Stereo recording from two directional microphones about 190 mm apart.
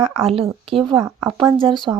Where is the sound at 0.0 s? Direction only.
30° right (ahead or behind).